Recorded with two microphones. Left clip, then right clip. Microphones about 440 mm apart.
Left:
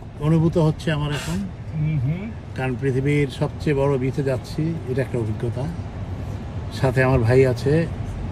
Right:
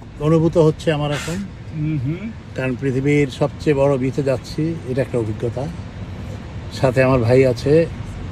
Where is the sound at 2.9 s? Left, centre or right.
Right.